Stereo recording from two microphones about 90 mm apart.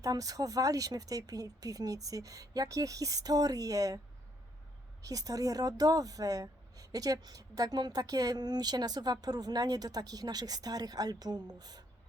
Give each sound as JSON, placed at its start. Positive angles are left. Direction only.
{"t": 0.0, "sound": "speech", "side_deg": -40}
{"t": 5.0, "sound": "speech", "side_deg": -40}